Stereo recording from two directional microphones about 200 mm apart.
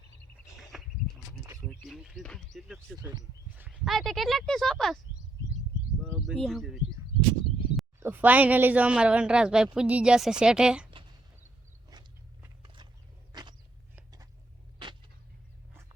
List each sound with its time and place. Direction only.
0.7 s a sound: 5° right (ahead or behind)
1.8 s speech: centre (ahead or behind)
3.0 s speech: 20° right (ahead or behind)
3.5 s speech: 5° right (ahead or behind)
7.9 s speech: 10° right (ahead or behind)
11.9 s biting: 20° right (ahead or behind)
12.6 s a sound: 25° right (ahead or behind)
13.3 s walk: 20° right (ahead or behind)